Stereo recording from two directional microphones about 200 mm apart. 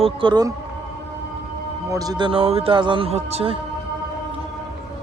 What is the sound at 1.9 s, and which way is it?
A man's voice, 20° right (ahead or behind).